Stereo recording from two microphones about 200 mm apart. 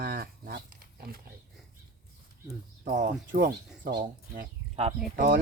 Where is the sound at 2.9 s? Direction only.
45° right (ahead or behind).